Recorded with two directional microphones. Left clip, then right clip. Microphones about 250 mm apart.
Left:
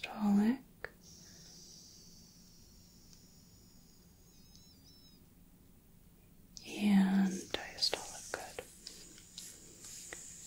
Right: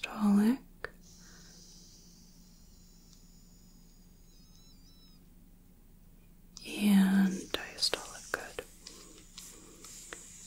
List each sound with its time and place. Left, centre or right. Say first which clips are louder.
0.0 s whispering: right 4 dB; centre
6.6 s whispering: right 4 dB; centre
8.8 s a sound: right 1 dB; right